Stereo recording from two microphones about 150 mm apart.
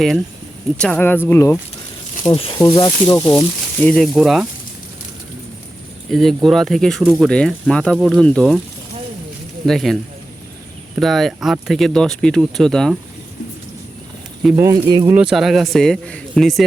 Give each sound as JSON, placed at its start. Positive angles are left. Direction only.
{"t": 0.8, "sound": "speech", "side_deg": 10}
{"t": 2.2, "sound": "speech", "side_deg": 35}
{"t": 3.2, "sound": "speech", "side_deg": 10}
{"t": 4.0, "sound": "speech", "side_deg": 0}
{"t": 6.1, "sound": "speech", "side_deg": 0}
{"t": 7.9, "sound": "speech", "side_deg": -5}
{"t": 8.2, "sound": "speech", "side_deg": 5}
{"t": 9.6, "sound": "speech", "side_deg": 0}
{"t": 11.0, "sound": "speech", "side_deg": 0}
{"t": 14.5, "sound": "speech", "side_deg": -20}
{"t": 15.1, "sound": "speech", "side_deg": -5}